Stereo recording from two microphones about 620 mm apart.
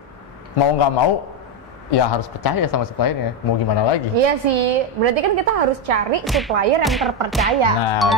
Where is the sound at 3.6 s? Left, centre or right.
Left.